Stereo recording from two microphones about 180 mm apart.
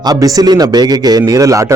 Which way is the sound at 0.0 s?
20° right (ahead or behind).